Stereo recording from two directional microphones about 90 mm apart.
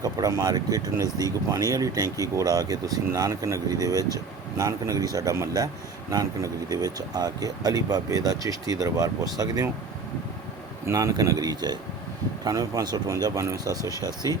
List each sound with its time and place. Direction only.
0.0 s speech: 40° right (ahead or behind)
10.8 s speech: 40° right (ahead or behind)